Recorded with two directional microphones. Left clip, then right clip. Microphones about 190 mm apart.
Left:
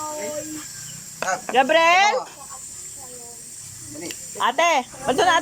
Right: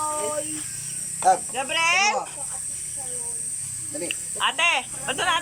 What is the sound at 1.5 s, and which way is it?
Speech, 45° left (ahead or behind).